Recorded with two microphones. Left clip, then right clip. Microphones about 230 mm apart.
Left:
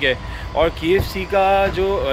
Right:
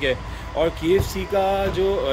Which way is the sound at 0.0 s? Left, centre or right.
Centre.